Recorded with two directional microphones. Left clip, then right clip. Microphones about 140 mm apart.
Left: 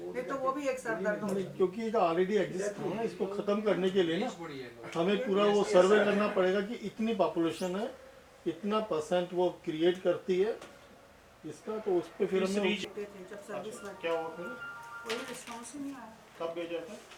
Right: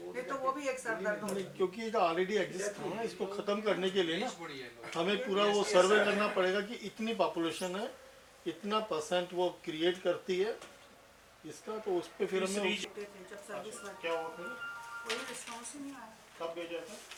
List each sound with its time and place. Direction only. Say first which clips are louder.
0.1 s a sound: left 2 dB; 15° left (ahead or behind)
0.6 s speech: left 3 dB; 10° left (ahead or behind)
0.9 s speech: left 1 dB; 25° left (ahead or behind)
1.2 s speech: left 4 dB; 10° left (ahead or behind)
11.7 s speech: left 4 dB; 15° left (ahead or behind)
13.3 s speech: left 2 dB; 25° left (ahead or behind)
13.7 s speech: left 3 dB; 10° left (ahead or behind)